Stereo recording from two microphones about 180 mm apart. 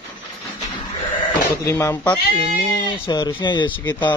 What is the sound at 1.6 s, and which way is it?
Speech, 15° left (ahead or behind).